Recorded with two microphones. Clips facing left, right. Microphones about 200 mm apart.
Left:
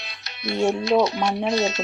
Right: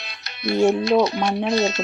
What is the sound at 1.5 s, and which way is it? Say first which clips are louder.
Speech: right 3 dB; 55° right (ahead or behind).